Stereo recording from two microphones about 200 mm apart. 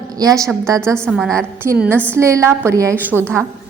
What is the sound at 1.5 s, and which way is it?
A woman's voice, 10° right (ahead or behind).